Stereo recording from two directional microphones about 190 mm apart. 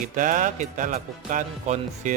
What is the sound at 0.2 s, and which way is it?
Speech, 40° right (ahead or behind).